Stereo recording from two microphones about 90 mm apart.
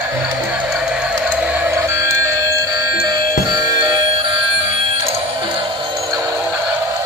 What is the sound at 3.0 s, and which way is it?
Music, 45° right (ahead or behind).